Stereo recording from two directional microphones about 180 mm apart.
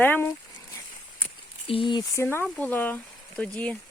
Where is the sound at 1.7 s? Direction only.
30° left (ahead or behind).